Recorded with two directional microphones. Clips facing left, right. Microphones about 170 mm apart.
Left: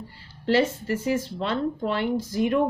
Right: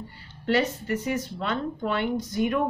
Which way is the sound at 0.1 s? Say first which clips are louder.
Left 2 dB; 30° left (ahead or behind).